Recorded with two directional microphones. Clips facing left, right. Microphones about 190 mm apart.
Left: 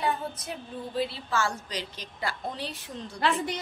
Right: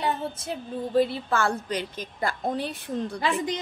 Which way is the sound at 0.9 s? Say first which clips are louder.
Right 6 dB; 50° right (ahead or behind).